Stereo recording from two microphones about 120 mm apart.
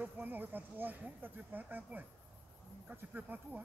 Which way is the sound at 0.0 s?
15° right (ahead or behind).